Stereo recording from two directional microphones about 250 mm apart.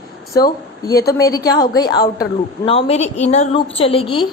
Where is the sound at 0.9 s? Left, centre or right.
Centre.